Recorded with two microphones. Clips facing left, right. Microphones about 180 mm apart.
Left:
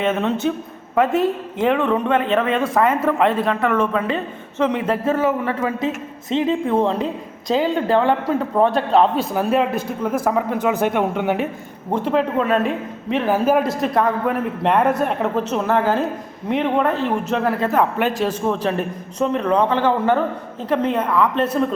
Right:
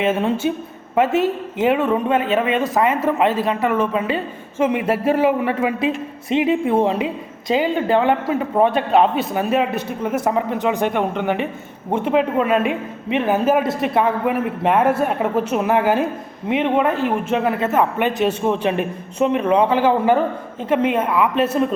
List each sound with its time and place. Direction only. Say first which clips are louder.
0.0 s a woman's voice: right 1 dB; 10° right (ahead or behind)
11.9 s a woman's voice: right 1 dB; 10° right (ahead or behind)
18.4 s a woman's voice: right 2 dB; 15° right (ahead or behind)